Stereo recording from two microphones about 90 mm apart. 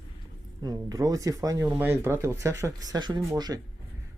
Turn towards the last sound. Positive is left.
turn(degrees=-50)  # may be behind; listen again after turning